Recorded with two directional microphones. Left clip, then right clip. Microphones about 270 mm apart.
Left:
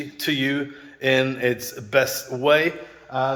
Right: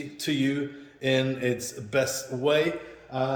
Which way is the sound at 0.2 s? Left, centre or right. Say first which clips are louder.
Left 4 dB; centre.